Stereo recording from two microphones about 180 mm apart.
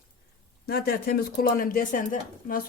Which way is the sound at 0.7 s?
55° left (ahead or behind).